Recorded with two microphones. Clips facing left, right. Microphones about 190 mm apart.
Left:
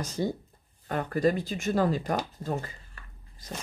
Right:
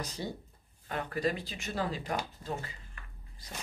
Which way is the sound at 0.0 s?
45° left (ahead or behind).